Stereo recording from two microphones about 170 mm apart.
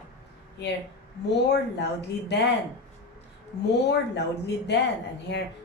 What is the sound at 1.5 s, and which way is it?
Speech, 80° left.